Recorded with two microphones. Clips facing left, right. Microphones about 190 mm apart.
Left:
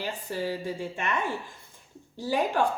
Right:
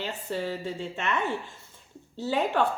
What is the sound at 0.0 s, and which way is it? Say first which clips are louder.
A woman's voice: even; 10° left (ahead or behind).